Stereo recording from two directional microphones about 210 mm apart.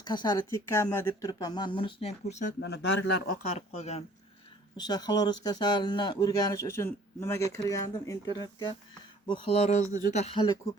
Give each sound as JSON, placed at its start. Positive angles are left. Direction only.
{"t": 0.0, "sound": "speech", "side_deg": 20}
{"t": 2.6, "sound": "speech", "side_deg": 55}
{"t": 3.4, "sound": "speech", "side_deg": 35}
{"t": 4.8, "sound": "speech", "side_deg": 20}